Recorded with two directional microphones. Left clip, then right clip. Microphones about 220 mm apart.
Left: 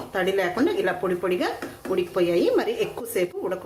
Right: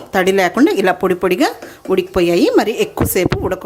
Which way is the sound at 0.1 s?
45° right (ahead or behind).